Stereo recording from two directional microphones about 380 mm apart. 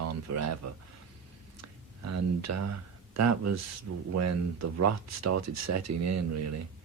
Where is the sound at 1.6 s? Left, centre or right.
Right.